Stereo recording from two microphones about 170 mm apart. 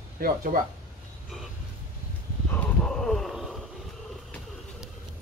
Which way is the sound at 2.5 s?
5° left (ahead or behind).